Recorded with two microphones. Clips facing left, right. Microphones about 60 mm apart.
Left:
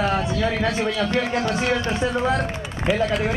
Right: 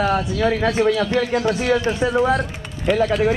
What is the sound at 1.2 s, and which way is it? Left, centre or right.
Speech, left.